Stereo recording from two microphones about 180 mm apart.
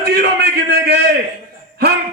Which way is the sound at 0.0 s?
65° right (ahead or behind).